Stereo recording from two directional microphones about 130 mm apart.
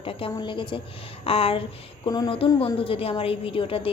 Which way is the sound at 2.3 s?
45° left (ahead or behind).